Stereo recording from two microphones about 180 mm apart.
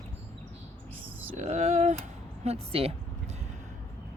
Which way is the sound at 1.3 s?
40° right (ahead or behind).